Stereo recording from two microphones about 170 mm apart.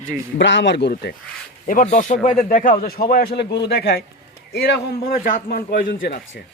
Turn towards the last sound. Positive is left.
turn(degrees=60)  # may be behind; listen again after turning